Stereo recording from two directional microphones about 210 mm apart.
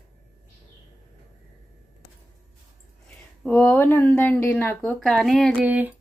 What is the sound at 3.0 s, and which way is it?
Speech, 5° left (ahead or behind).